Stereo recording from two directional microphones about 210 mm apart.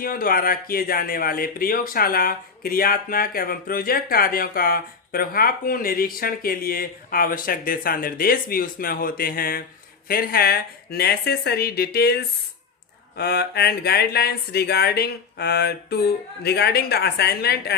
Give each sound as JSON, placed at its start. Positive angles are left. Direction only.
{"t": 0.0, "sound": "speech", "side_deg": 45}